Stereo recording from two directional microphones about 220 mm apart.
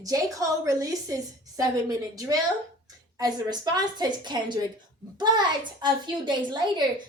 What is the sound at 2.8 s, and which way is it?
A woman's voice, 15° right (ahead or behind).